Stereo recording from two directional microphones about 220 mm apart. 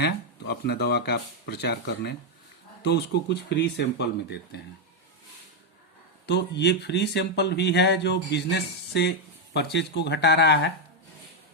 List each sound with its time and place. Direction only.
0.0 s speech: 50° left (ahead or behind)
6.2 s speech: 50° left (ahead or behind)